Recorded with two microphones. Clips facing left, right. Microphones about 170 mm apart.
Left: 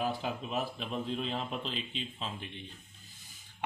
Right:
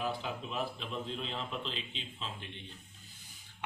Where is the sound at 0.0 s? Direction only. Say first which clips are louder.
Left 3 dB; 45° left (ahead or behind).